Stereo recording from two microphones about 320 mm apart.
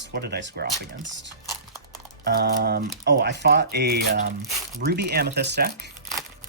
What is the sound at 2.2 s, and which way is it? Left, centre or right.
Speech, right.